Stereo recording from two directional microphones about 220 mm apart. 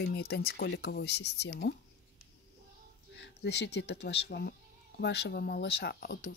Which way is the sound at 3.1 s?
50° left (ahead or behind).